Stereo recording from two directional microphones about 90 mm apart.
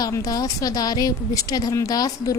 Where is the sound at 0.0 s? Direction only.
40° left (ahead or behind).